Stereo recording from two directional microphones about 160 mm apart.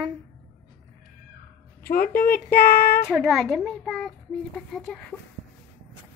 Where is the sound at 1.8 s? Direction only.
70° left (ahead or behind).